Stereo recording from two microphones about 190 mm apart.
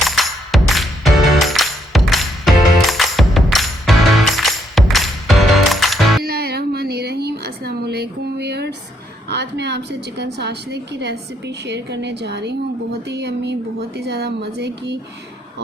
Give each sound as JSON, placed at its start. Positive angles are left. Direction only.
{"t": 0.0, "sound": "music", "side_deg": 0}
{"t": 6.2, "sound": "a sound", "side_deg": -55}
{"t": 9.3, "sound": "a woman's voice", "side_deg": -65}